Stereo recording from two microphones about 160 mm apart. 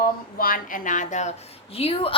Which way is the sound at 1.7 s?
35° left (ahead or behind).